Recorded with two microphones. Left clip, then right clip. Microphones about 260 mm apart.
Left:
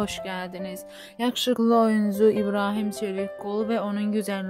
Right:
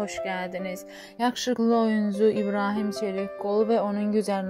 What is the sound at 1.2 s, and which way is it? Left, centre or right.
Speech, centre.